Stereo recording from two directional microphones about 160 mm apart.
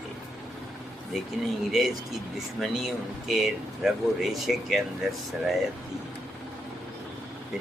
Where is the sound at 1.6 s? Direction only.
Centre (ahead or behind).